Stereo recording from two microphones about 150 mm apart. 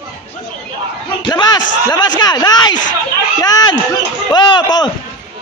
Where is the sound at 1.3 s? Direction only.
30° left (ahead or behind).